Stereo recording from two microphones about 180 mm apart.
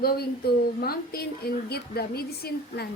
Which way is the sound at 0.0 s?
60° left (ahead or behind).